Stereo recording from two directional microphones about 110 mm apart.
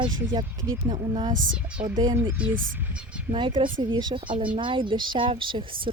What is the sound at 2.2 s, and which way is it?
Speech, 15° right (ahead or behind).